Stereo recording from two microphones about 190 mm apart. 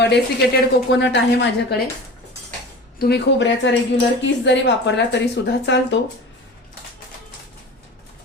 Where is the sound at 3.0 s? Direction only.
60° left (ahead or behind).